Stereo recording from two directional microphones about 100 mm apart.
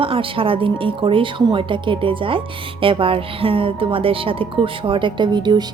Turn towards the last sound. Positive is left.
turn(degrees=-50)  # may be behind; listen again after turning